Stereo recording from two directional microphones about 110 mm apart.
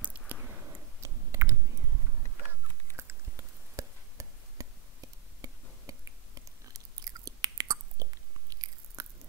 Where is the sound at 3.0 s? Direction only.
25° right (ahead or behind).